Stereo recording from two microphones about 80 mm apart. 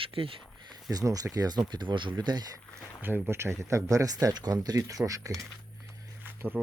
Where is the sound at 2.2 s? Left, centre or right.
Right.